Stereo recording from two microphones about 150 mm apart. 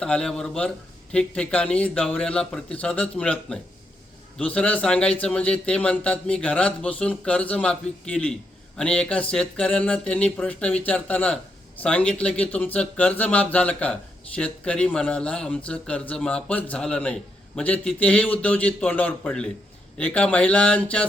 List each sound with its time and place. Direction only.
0.0 s a man's voice: 5° left (ahead or behind)